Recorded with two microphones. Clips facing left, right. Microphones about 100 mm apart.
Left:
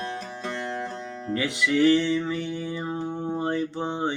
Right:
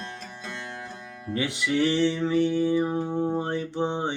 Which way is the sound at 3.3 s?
20° right (ahead or behind).